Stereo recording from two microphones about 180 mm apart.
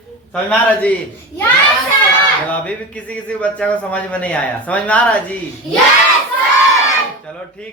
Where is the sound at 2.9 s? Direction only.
5° left (ahead or behind).